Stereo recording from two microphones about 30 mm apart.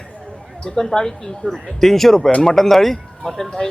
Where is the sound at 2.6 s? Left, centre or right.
Centre.